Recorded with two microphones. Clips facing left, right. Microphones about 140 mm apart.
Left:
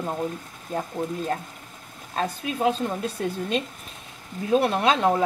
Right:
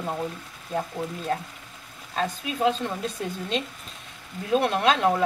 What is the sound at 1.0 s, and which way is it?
Speech, 50° left (ahead or behind).